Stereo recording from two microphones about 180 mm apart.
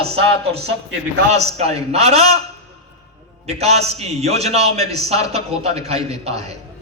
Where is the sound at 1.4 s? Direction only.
35° right (ahead or behind).